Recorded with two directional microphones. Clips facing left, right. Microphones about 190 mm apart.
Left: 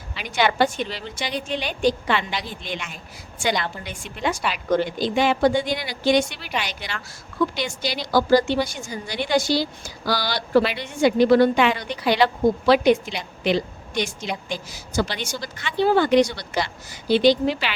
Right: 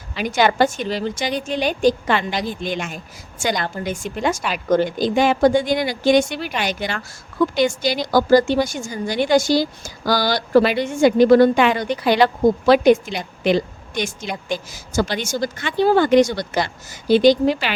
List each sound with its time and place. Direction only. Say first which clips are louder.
0.2 s a woman's voice: right 4 dB; 45° right (ahead or behind)